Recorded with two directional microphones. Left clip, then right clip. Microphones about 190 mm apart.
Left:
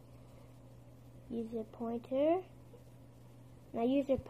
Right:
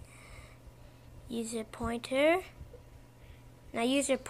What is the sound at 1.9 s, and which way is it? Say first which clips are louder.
Speech: right 5 dB; 10° right (ahead or behind).